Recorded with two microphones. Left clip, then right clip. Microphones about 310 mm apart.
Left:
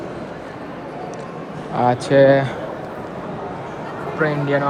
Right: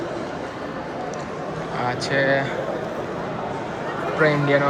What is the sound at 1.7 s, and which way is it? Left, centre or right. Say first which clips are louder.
Speech: left 8 dB; centre.